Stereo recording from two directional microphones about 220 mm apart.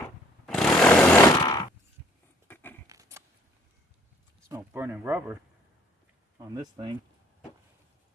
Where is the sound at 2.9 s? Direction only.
15° right (ahead or behind).